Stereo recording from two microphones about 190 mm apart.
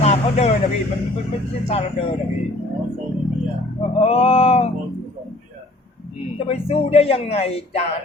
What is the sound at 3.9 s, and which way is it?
Speech, 30° left (ahead or behind).